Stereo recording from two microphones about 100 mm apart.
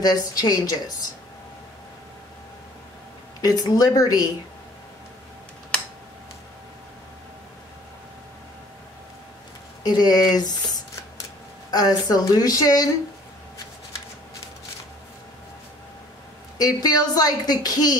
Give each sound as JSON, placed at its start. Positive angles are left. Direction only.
{"t": 0.0, "sound": "a woman's voice", "side_deg": 40}
{"t": 3.3, "sound": "a woman's voice", "side_deg": 45}
{"t": 9.8, "sound": "a woman's voice", "side_deg": 40}
{"t": 16.5, "sound": "a woman's voice", "side_deg": 40}